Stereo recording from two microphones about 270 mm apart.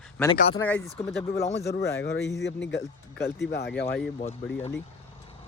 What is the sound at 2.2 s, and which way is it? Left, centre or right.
Speech, centre.